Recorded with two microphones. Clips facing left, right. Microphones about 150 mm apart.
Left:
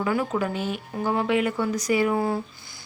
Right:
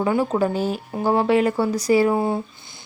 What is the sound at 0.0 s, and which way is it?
A woman's voice, 30° right (ahead or behind).